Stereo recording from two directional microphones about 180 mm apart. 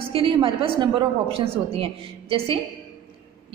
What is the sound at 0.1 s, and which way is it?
A woman's voice, 30° right (ahead or behind).